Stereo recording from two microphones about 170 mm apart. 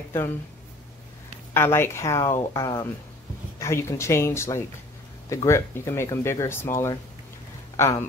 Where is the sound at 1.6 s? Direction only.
15° left (ahead or behind).